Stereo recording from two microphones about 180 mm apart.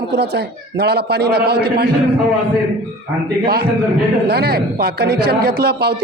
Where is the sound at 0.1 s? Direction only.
65° right (ahead or behind).